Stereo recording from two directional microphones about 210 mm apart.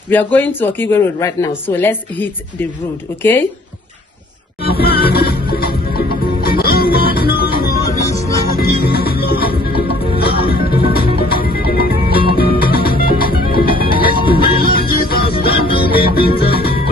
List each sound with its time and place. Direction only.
0.1 s speech: 10° left (ahead or behind)
4.6 s music: 45° left (ahead or behind)